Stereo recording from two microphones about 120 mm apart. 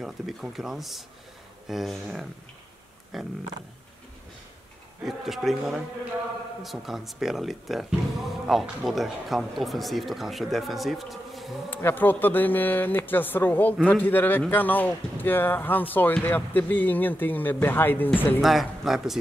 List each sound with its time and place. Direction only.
0.0 s speech: centre (ahead or behind)
5.0 s speech: centre (ahead or behind)
11.7 s speech: 15° left (ahead or behind)
18.4 s speech: centre (ahead or behind)